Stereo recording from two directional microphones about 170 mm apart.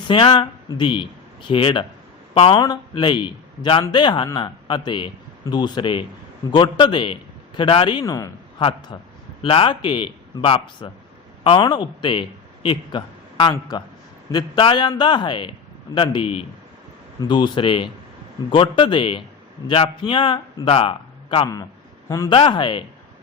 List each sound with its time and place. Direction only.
0.1 s a man's voice: 30° left (ahead or behind)